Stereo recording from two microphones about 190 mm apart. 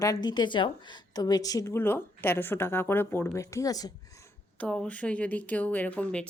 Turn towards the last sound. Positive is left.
turn(degrees=5)  # may be behind; listen again after turning